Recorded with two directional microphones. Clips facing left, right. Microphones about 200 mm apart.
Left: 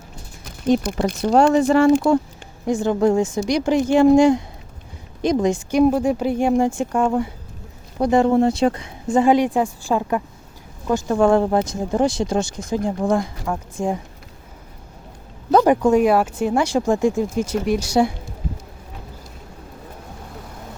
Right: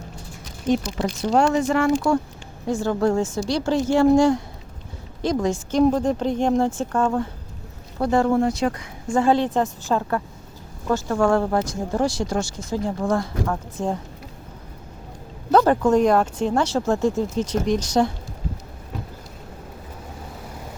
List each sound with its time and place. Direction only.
0.8 s speech: 55° left (ahead or behind)
1.5 s speech: 30° left (ahead or behind)
2.6 s speech: 15° left (ahead or behind)
15.5 s speech: 15° left (ahead or behind)